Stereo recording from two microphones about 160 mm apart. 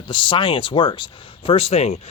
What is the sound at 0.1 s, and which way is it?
Speech, 30° left (ahead or behind).